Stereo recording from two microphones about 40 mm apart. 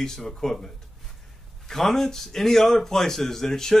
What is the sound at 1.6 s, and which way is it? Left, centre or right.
A man's voice, centre.